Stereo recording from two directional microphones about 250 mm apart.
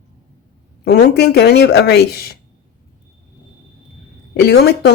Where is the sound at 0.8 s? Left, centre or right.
Left.